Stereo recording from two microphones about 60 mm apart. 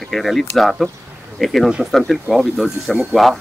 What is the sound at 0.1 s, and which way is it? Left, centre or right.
Speech, centre.